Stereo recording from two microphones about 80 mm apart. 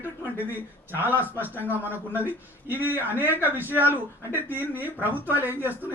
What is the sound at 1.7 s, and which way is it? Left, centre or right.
Speech, right.